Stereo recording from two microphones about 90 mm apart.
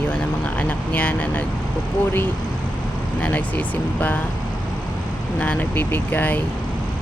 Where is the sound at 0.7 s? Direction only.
15° left (ahead or behind).